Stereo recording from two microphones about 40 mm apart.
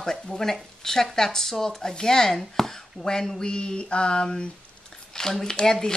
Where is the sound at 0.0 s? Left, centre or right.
Centre.